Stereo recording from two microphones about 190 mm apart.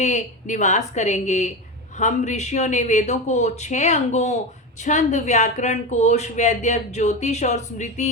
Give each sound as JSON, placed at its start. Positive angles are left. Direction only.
{"t": 0.0, "sound": "a woman's voice", "side_deg": 40}